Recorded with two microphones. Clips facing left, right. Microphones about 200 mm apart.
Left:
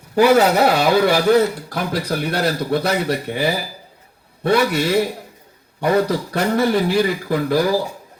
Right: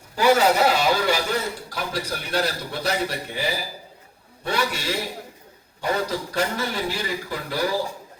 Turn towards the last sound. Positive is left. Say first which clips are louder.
# left 9 dB
turn(degrees=60)  # may be behind; listen again after turning